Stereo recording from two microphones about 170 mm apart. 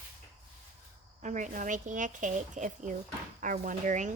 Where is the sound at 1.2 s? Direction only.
45° right (ahead or behind).